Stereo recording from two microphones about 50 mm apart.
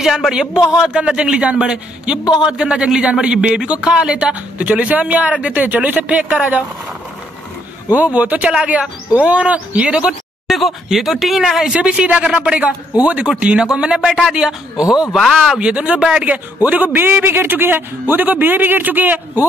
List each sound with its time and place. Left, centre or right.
0.3 s a man's voice: centre
7.9 s a man's voice: right
10.5 s speech: centre
11.7 s a man's voice: right; by 15.6 s centre
15.6 s a man's voice: right
16.3 s speech: right